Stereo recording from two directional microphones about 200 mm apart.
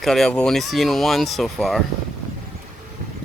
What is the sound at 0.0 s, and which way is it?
Speech, centre (ahead or behind).